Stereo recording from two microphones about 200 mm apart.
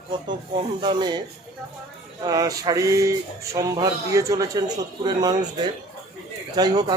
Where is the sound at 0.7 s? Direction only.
20° right (ahead or behind).